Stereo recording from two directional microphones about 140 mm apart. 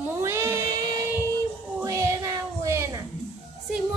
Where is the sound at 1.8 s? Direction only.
25° right (ahead or behind).